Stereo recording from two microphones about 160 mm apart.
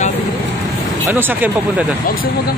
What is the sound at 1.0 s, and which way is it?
Speech, 10° right (ahead or behind).